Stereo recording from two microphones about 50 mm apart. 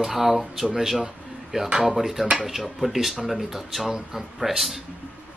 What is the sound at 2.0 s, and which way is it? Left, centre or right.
Speech, centre.